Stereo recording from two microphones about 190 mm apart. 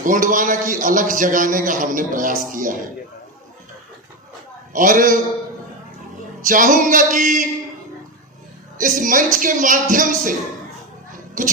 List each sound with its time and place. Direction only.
0.0 s a man's voice: 45° right (ahead or behind)
4.7 s a man's voice: 45° right (ahead or behind)
6.5 s a man's voice: 45° right (ahead or behind)
8.8 s a man's voice: 45° right (ahead or behind)
11.1 s a sound: 45° right (ahead or behind)